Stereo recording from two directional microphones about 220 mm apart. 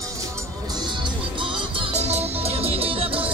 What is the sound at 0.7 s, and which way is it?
Music, 20° right (ahead or behind).